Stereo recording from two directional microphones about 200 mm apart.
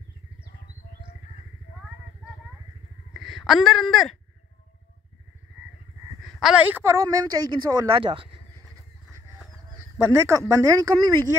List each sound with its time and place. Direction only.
3.1 s speech: centre (ahead or behind)
6.2 s a man's voice: 5° right (ahead or behind); by 8.4 s 25° right (ahead or behind)
9.9 s a man's voice: 15° right (ahead or behind)